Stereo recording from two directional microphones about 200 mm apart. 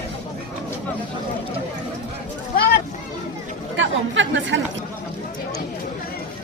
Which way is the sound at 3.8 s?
70° right (ahead or behind).